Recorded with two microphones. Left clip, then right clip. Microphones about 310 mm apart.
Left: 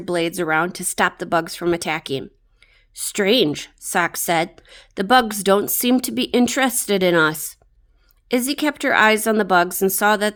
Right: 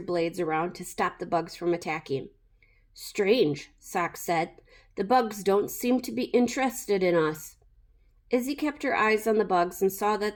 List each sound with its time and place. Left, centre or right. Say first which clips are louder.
0.0 s a woman's voice: left 6 dB; left